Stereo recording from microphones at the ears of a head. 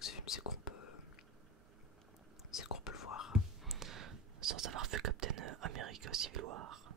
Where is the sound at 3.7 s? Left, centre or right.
Right.